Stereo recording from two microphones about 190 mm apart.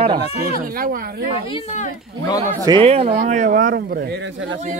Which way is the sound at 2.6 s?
30° right (ahead or behind).